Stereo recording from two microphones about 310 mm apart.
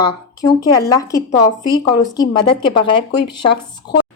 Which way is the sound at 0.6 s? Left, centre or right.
Centre.